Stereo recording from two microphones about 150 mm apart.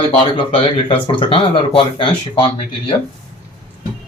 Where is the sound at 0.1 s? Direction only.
35° left (ahead or behind).